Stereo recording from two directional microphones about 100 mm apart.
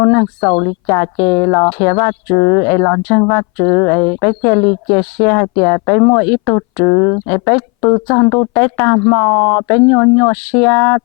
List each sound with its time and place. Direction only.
0.0 s speech: 20° left (ahead or behind)